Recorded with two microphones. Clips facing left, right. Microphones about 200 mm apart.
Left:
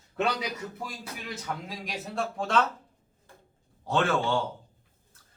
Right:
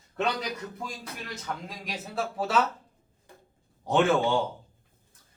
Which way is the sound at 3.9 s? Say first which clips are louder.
Right 3 dB; 20° right (ahead or behind).